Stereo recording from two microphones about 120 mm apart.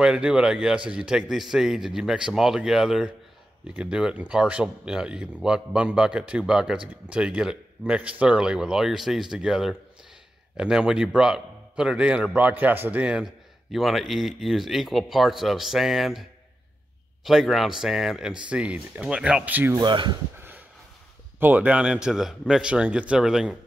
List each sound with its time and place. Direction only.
0.0 s a man's voice: 5° right (ahead or behind)
19.8 s speech: 40° right (ahead or behind)
20.3 s a sound: 15° right (ahead or behind)
21.4 s speech: 15° right (ahead or behind)